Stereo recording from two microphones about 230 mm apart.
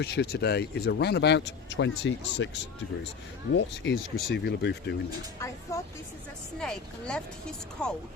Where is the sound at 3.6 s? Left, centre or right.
Left.